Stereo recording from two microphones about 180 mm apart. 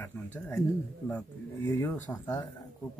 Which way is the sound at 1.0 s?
15° left (ahead or behind).